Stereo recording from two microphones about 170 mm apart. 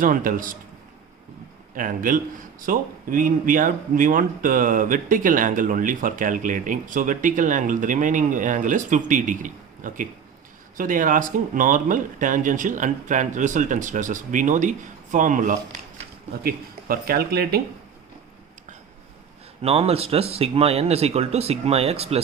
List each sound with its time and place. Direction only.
0.0 s speech: 55° right (ahead or behind)
1.7 s speech: 55° right (ahead or behind)
16.4 s speech: 60° right (ahead or behind)
19.6 s speech: 35° right (ahead or behind)